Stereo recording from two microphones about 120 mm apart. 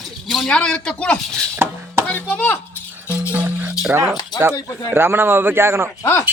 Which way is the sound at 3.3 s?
15° right (ahead or behind).